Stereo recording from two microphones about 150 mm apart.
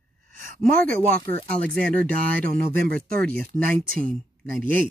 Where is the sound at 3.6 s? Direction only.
70° right (ahead or behind).